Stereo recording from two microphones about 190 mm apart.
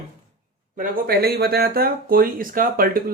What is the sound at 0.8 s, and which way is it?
Speech, 55° right (ahead or behind).